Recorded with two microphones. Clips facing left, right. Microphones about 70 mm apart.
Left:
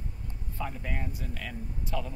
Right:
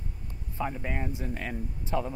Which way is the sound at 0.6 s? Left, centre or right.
Right.